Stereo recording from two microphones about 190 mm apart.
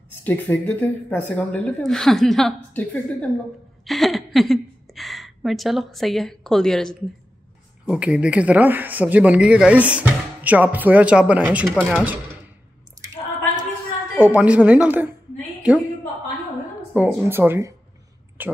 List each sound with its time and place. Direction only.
0.2 s a woman's voice: 10° left (ahead or behind); by 12.2 s 10° right (ahead or behind)
14.1 s a man's voice: 10° right (ahead or behind)
16.9 s a man's voice: 10° right (ahead or behind)